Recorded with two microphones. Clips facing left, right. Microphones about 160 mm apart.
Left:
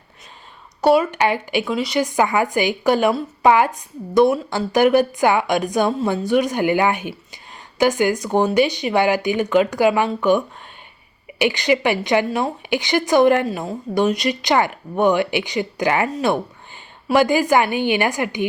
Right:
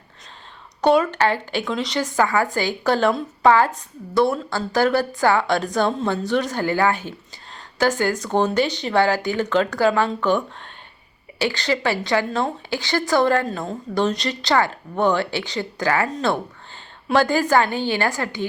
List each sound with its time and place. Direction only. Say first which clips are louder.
0.8 s a woman's voice: left 1 dB; 10° left (ahead or behind)